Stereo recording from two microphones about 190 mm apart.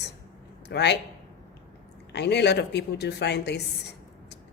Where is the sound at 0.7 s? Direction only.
65° left (ahead or behind).